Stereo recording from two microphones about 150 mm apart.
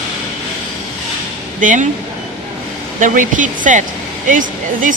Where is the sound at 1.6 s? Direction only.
60° right (ahead or behind).